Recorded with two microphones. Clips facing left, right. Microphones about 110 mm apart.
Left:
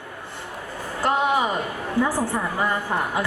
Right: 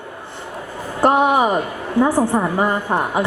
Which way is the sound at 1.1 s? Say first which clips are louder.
Right 6 dB; 25° right (ahead or behind).